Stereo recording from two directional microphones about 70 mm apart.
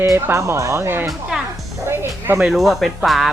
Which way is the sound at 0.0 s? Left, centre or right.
Right.